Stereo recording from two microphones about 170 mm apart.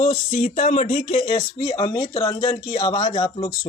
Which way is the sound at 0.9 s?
35° left (ahead or behind).